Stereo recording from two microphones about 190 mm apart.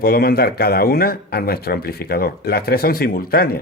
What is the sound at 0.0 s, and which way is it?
Speech, 55° left (ahead or behind).